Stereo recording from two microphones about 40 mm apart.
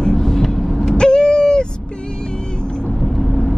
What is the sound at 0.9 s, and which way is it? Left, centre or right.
Owl, left.